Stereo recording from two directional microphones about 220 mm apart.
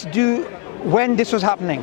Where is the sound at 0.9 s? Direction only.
20° left (ahead or behind).